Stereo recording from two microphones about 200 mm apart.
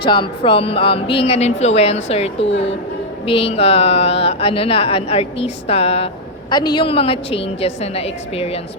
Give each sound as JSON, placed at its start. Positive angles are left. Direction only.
{"t": 0.0, "sound": "speech", "side_deg": 25}
{"t": 2.4, "sound": "speech", "side_deg": 65}
{"t": 3.2, "sound": "speech", "side_deg": 30}